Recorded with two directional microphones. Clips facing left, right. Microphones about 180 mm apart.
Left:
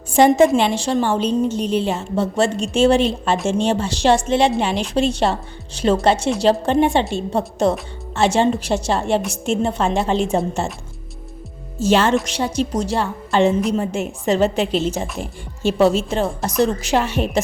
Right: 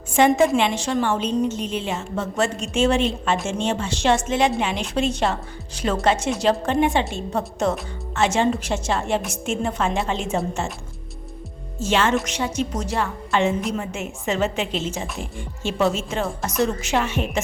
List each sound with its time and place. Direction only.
0.1 s a woman's voice: 35° left (ahead or behind)
11.8 s a woman's voice: 35° left (ahead or behind)
15.0 s speech: centre (ahead or behind)
15.6 s a woman's voice: 35° left (ahead or behind)